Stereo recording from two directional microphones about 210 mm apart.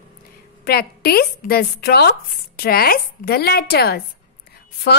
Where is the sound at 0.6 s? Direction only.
50° left (ahead or behind).